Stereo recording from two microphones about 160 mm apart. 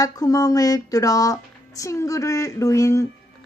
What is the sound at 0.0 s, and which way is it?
Speech, 20° left (ahead or behind).